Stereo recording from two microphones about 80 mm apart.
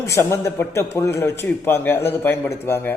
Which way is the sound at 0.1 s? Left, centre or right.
Left.